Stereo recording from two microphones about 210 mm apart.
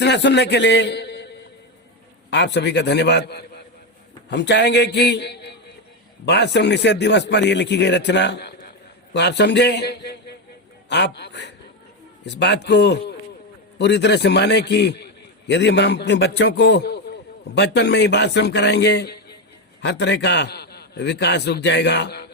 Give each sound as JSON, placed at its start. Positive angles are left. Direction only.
{"t": 0.0, "sound": "a man's voice", "side_deg": 55}